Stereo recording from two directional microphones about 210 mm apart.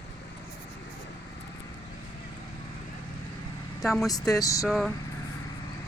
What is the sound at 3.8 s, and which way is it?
Speech, centre (ahead or behind).